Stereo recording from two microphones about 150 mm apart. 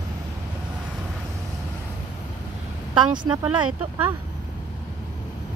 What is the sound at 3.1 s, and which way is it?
Speech, 30° right (ahead or behind).